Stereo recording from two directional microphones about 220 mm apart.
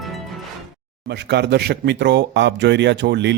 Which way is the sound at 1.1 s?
50° right (ahead or behind).